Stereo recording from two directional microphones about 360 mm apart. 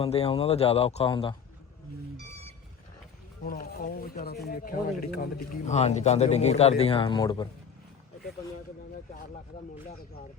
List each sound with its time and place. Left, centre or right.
0.0 s speech: centre
3.4 s speech: left